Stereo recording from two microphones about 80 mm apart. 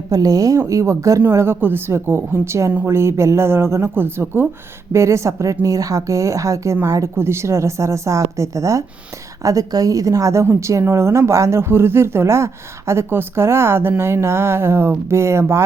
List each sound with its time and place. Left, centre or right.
0.1 s a woman's voice: right